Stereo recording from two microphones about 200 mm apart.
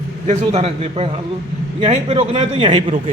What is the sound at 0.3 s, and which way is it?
A man's voice, 30° right (ahead or behind).